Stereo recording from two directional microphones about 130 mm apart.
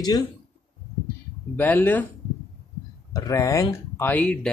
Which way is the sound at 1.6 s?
15° left (ahead or behind).